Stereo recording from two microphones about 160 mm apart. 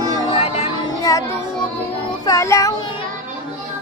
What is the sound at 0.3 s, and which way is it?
Music, 40° left (ahead or behind).